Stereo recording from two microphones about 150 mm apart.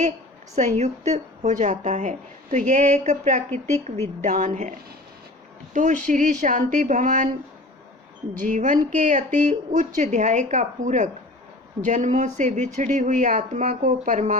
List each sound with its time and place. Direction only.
0.5 s a woman's voice: 50° right (ahead or behind)
5.7 s a woman's voice: 55° right (ahead or behind)
8.4 s a woman's voice: 60° right (ahead or behind)